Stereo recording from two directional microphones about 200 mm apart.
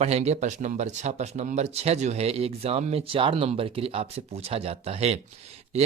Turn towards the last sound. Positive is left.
turn(degrees=-30)  # may be behind; listen again after turning